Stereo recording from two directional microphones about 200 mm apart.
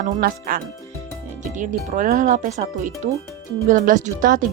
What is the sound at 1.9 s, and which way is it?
Speech, 40° right (ahead or behind).